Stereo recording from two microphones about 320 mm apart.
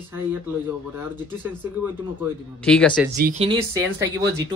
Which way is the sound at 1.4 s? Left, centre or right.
Centre.